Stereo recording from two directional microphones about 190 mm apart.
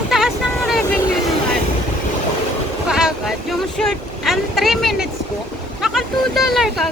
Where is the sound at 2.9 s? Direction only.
5° right (ahead or behind).